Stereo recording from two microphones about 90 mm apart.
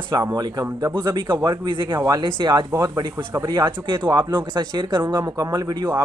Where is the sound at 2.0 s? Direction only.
50° right (ahead or behind).